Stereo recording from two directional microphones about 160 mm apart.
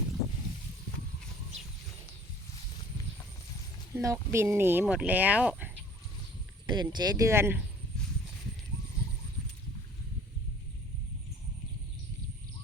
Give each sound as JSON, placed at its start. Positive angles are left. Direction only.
{"t": 3.9, "sound": "speech", "side_deg": -20}
{"t": 6.7, "sound": "speech", "side_deg": -25}